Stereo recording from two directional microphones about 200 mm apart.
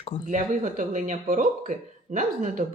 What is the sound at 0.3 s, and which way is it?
Speech, 40° right (ahead or behind).